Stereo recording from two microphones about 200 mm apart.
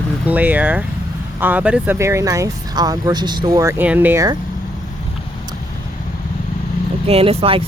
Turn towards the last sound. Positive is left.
turn(degrees=-30)  # may be behind; listen again after turning